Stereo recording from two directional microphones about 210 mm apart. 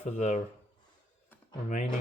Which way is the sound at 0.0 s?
35° left (ahead or behind).